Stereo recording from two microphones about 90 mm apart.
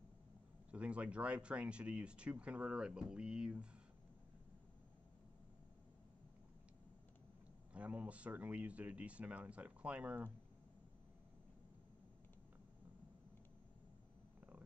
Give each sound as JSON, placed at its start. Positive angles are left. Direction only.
{"t": 0.7, "sound": "speech", "side_deg": -15}
{"t": 7.7, "sound": "speech", "side_deg": -15}